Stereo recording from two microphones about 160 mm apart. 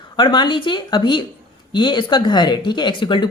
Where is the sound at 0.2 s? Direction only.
30° left (ahead or behind).